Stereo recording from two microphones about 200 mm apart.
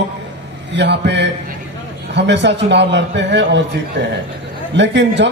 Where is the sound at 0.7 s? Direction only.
60° right (ahead or behind).